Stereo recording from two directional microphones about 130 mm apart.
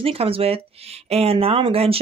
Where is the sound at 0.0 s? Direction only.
45° right (ahead or behind).